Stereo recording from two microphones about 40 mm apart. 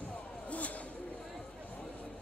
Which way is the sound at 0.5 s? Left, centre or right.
Left.